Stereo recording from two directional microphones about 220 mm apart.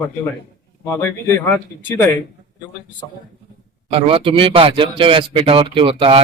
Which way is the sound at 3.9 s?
25° right (ahead or behind).